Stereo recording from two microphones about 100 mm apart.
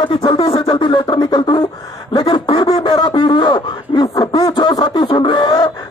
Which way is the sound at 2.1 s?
55° left (ahead or behind).